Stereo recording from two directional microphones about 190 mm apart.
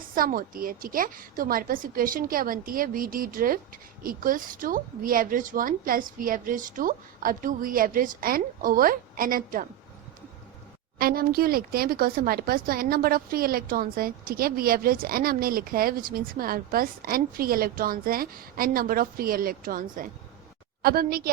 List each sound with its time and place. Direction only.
0.1 s speech: 50° right (ahead or behind)
10.9 s speech: 50° right (ahead or behind)